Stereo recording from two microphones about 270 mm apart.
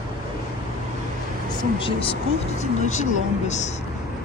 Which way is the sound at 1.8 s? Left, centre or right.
Left.